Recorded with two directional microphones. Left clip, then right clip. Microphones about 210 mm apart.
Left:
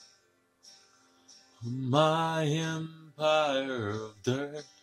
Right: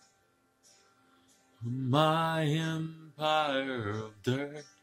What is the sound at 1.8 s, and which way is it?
Mantra, 20° right (ahead or behind).